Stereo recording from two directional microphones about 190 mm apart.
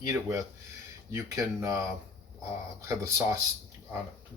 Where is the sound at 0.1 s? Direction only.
15° right (ahead or behind).